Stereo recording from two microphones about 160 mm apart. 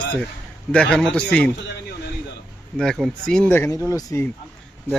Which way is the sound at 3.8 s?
20° left (ahead or behind).